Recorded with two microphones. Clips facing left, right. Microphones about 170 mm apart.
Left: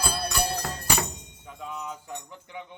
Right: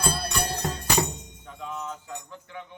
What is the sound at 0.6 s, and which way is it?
Music, 25° right (ahead or behind).